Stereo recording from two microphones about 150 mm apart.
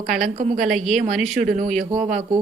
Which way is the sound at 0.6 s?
Centre (ahead or behind).